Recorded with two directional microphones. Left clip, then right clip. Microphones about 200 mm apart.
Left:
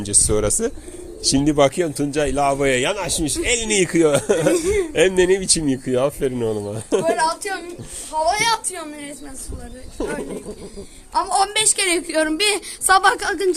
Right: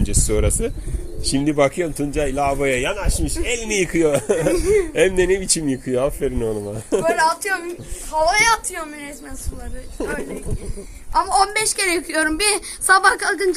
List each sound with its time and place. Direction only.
0.0 s speech: 5° left (ahead or behind)
1.2 s speech: 15° left (ahead or behind); by 8.9 s centre (ahead or behind)
10.0 s speech: centre (ahead or behind)
11.1 s speech: 15° left (ahead or behind)
12.9 s a woman's voice: 30° left (ahead or behind)